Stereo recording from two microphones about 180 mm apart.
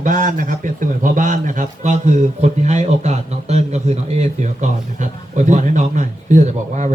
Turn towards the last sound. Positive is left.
turn(degrees=-40)  # may be behind; listen again after turning